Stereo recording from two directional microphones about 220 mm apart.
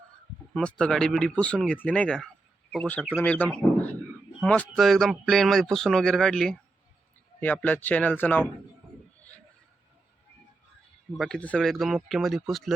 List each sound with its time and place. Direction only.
0.5 s speech: 5° left (ahead or behind)
11.2 s speech: 5° left (ahead or behind)